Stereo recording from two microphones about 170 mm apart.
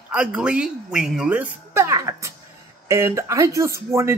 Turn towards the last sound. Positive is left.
turn(degrees=-15)  # may be behind; listen again after turning